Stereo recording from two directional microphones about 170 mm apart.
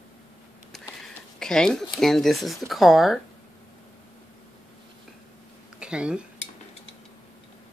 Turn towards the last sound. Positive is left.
turn(degrees=-5)  # may be behind; listen again after turning